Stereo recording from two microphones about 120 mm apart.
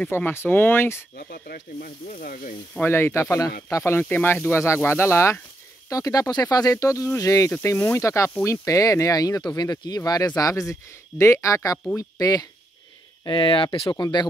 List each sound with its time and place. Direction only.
0.1 s speech: 20° left (ahead or behind)
1.9 s speech: 90° left
2.8 s speech: 20° left (ahead or behind)
13.2 s speech: 45° left (ahead or behind)